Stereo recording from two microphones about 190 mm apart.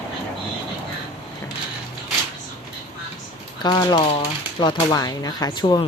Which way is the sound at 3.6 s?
20° left (ahead or behind).